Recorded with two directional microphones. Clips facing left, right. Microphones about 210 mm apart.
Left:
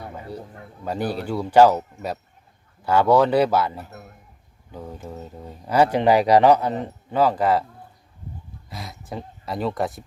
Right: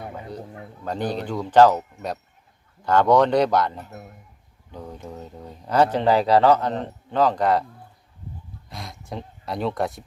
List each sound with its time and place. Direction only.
0.9 s speech: 10° left (ahead or behind)
8.7 s speech: 5° left (ahead or behind)